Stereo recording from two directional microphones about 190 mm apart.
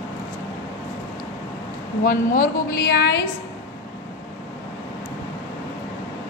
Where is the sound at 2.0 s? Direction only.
55° left (ahead or behind).